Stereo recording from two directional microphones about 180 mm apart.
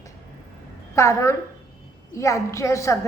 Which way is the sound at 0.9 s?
15° left (ahead or behind).